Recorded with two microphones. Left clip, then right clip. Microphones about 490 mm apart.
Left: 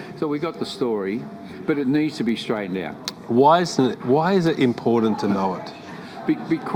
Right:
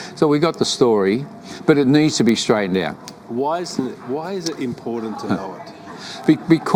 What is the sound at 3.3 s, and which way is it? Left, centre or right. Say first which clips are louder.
Speech: left 6 dB; left.